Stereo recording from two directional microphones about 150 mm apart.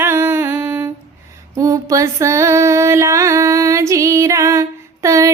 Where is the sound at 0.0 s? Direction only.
15° right (ahead or behind).